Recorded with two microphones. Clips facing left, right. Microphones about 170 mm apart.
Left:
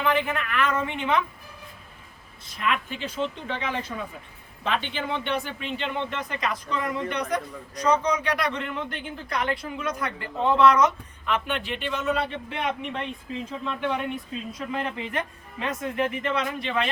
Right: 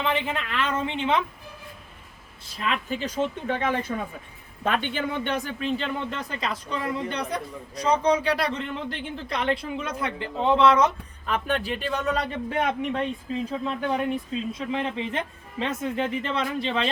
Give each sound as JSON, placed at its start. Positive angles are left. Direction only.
{"t": 0.0, "sound": "speech", "side_deg": -25}
{"t": 2.6, "sound": "a man's voice", "side_deg": -35}
{"t": 14.7, "sound": "speech", "side_deg": -25}